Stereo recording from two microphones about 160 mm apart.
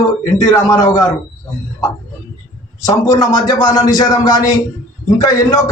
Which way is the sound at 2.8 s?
20° left (ahead or behind).